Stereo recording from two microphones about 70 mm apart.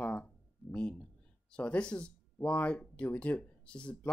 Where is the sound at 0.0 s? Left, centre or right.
Left.